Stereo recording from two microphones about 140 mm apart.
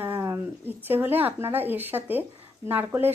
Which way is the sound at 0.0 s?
20° right (ahead or behind).